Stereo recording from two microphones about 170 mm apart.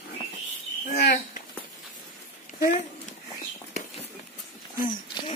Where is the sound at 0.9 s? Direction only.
65° left (ahead or behind).